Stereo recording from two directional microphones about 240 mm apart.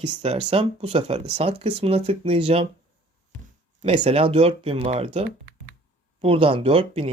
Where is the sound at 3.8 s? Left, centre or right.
Right.